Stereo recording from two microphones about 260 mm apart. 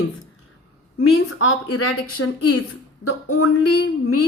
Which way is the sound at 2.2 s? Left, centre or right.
Left.